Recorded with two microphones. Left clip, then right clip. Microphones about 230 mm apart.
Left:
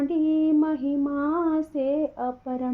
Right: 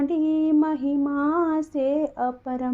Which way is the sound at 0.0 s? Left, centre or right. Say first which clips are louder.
Even; right.